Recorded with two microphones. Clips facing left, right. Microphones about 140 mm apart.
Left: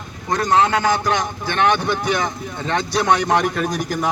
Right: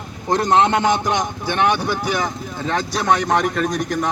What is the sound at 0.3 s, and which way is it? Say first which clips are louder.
A man's voice: right 1 dB; 25° right (ahead or behind).